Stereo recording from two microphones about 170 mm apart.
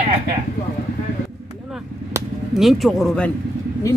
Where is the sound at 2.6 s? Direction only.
Centre (ahead or behind).